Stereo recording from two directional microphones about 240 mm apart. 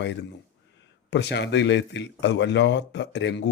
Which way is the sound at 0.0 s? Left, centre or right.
Left.